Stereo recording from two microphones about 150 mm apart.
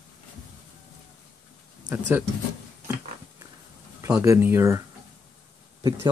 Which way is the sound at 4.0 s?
20° right (ahead or behind).